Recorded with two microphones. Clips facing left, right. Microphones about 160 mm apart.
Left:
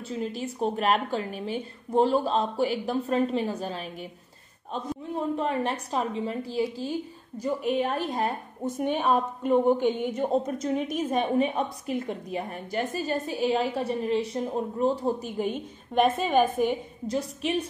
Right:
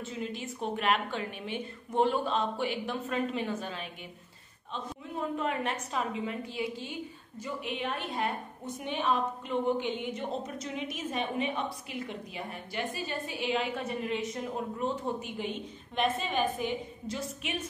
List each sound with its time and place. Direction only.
0.0 s a woman's voice: 35° left (ahead or behind)
5.4 s a woman's voice: 35° left (ahead or behind)